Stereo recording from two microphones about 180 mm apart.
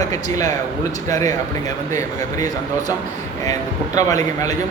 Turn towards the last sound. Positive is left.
turn(degrees=20)  # may be behind; listen again after turning